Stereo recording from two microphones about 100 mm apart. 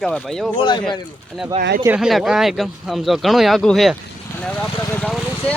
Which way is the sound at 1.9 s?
5° right (ahead or behind).